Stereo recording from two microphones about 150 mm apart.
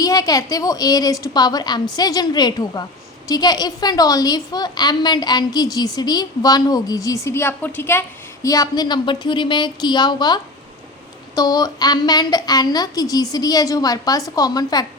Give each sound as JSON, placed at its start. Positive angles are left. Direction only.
{"t": 0.0, "sound": "a woman's voice", "side_deg": 25}